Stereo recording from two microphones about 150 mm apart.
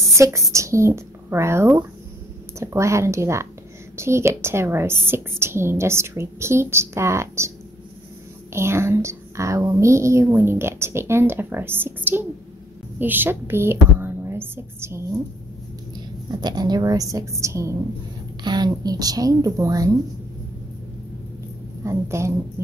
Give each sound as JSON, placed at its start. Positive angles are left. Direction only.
{"t": 0.2, "sound": "a woman's voice", "side_deg": -20}
{"t": 8.5, "sound": "a woman's voice", "side_deg": -15}
{"t": 16.3, "sound": "a woman's voice", "side_deg": -30}
{"t": 21.8, "sound": "a woman's voice", "side_deg": -20}